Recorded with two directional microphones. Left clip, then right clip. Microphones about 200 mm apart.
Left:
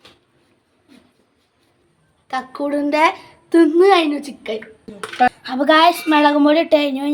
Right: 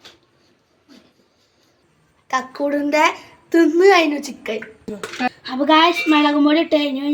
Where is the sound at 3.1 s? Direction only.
45° left (ahead or behind).